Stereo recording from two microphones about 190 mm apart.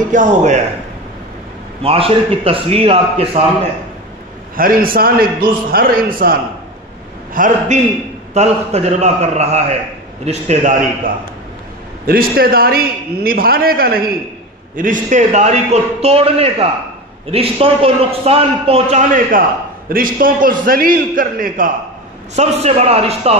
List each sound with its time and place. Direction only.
0.1 s a man's voice: 40° right (ahead or behind)
1.8 s a man's voice: 30° right (ahead or behind)
4.6 s a man's voice: 50° right (ahead or behind)
7.3 s a man's voice: 45° right (ahead or behind)
12.1 s a man's voice: 50° right (ahead or behind)
19.9 s a man's voice: 50° right (ahead or behind)
22.3 s a man's voice: 35° right (ahead or behind)